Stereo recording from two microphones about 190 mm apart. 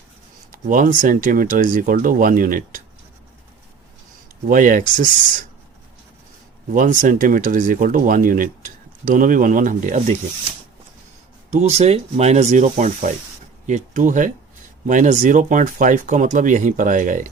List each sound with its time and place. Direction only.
0.5 s speech: 45° right (ahead or behind)
4.4 s speech: 45° right (ahead or behind)
6.7 s speech: 40° right (ahead or behind)
11.5 s speech: 35° right (ahead or behind)